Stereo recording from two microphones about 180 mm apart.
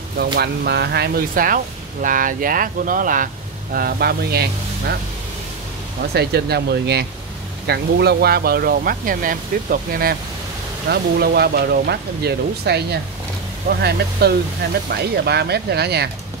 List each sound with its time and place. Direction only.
0.2 s speech: 65° right (ahead or behind); by 3.3 s 50° right (ahead or behind)
3.7 s speech: 60° right (ahead or behind)
6.1 s speech: 65° right (ahead or behind)